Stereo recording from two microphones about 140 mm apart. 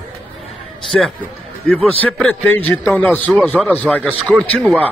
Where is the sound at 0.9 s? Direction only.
5° left (ahead or behind).